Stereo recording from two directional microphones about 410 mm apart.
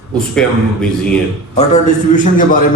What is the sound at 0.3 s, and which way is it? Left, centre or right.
Speech, centre.